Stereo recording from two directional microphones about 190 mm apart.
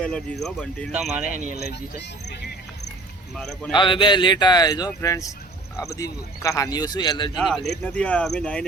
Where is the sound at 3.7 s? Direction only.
25° left (ahead or behind).